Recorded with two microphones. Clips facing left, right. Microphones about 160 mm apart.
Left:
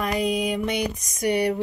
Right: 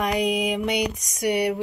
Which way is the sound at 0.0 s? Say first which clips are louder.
Right 1 dB; 15° right (ahead or behind).